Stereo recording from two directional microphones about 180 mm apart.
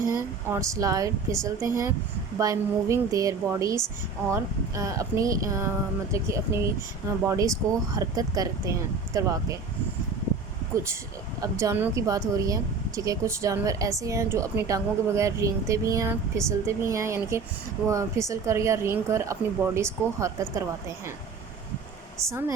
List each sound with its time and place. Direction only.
0.4 s a woman's voice: 15° right (ahead or behind)
11.3 s a woman's voice: 15° right (ahead or behind)
22.3 s a woman's voice: 15° right (ahead or behind)